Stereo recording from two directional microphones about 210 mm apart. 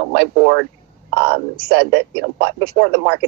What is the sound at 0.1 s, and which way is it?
A woman's voice, 45° right (ahead or behind).